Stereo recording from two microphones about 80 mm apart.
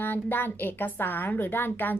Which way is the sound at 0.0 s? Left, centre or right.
Left.